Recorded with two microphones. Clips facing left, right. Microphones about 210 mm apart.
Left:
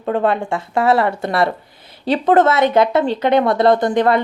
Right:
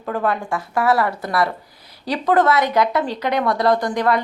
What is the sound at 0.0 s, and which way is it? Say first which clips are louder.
Speech: left 5 dB; 25° left (ahead or behind).